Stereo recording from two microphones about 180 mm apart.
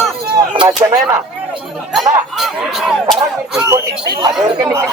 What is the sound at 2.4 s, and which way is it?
Speech, centre (ahead or behind).